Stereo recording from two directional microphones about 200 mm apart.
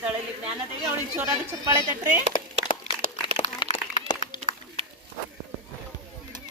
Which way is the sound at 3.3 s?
30° left (ahead or behind).